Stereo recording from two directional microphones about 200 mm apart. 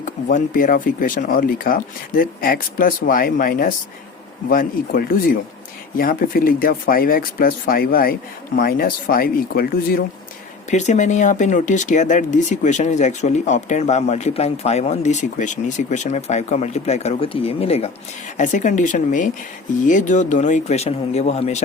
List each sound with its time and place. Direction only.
0.0 s speech: 40° left (ahead or behind)
10.7 s speech: 35° left (ahead or behind)